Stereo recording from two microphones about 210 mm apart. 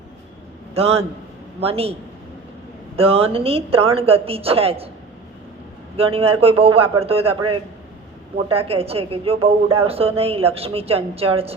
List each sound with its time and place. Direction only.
0.7 s a man's voice: 30° right (ahead or behind)
6.0 s a woman's voice: 25° right (ahead or behind)